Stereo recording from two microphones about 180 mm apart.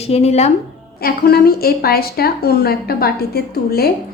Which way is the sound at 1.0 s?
60° left (ahead or behind).